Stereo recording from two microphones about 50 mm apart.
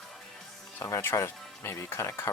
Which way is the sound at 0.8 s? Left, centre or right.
Left.